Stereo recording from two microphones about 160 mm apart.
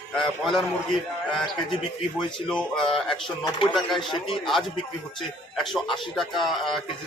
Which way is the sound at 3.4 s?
25° left (ahead or behind).